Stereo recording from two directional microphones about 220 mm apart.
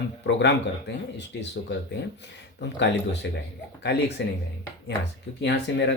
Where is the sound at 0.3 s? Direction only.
55° left (ahead or behind).